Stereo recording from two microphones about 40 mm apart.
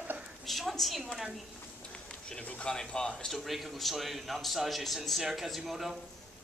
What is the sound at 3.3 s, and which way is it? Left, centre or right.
A man's voice, centre.